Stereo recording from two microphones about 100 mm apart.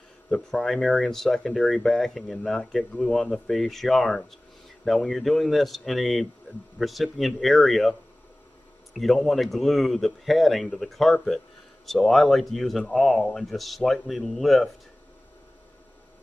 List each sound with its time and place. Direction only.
0.3 s speech: 5° left (ahead or behind)
8.9 s speech: centre (ahead or behind)